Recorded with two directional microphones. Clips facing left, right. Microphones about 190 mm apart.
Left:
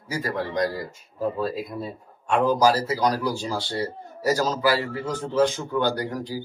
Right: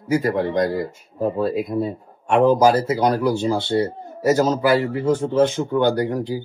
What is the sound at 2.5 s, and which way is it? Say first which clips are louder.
A man's voice: right 5 dB; 20° right (ahead or behind).